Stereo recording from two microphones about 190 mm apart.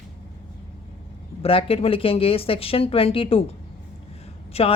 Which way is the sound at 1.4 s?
30° left (ahead or behind).